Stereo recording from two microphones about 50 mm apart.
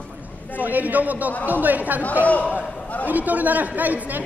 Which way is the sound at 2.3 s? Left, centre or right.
Left.